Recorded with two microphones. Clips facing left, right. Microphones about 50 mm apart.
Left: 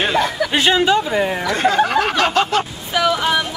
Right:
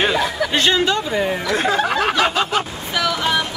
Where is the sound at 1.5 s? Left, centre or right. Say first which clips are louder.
Left 3 dB; centre.